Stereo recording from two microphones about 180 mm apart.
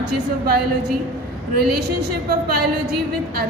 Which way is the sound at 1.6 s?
60° right (ahead or behind).